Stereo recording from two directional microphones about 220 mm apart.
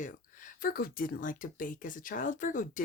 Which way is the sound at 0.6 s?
40° left (ahead or behind).